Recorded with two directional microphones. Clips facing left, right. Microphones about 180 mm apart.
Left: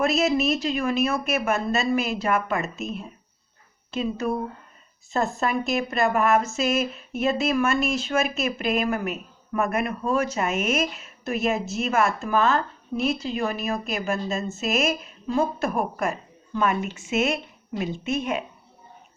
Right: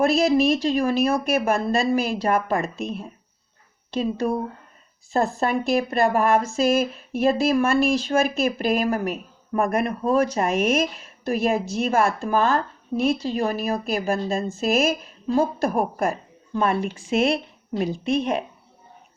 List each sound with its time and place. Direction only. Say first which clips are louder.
0.0 s a woman's voice: right 4 dB; 30° right (ahead or behind)